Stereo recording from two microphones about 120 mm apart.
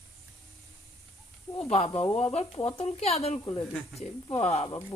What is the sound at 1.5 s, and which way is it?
A woman's voice, 60° left (ahead or behind).